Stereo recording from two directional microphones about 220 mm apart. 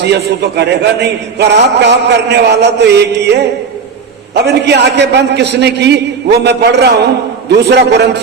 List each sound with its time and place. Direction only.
0.0 s a man's voice: 50° right (ahead or behind)
4.4 s a man's voice: 50° right (ahead or behind)